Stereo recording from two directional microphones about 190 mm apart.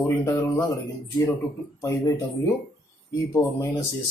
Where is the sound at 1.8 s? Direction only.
15° left (ahead or behind).